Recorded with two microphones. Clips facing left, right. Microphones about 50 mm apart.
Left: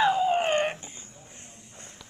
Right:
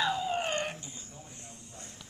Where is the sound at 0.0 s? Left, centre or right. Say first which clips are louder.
Left 8 dB; left.